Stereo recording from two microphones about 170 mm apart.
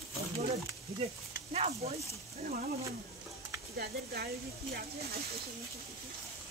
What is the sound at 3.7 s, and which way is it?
Speech, 65° right (ahead or behind).